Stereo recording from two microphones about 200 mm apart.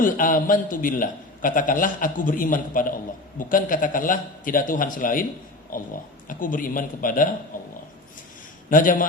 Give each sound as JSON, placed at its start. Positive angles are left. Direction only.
{"t": 0.0, "sound": "a man's voice", "side_deg": 45}
{"t": 8.7, "sound": "a man's voice", "side_deg": 40}